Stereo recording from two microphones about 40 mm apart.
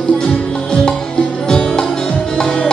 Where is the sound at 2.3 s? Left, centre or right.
Centre.